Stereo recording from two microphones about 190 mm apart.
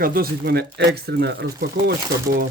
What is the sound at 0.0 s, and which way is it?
Speech, 50° right (ahead or behind).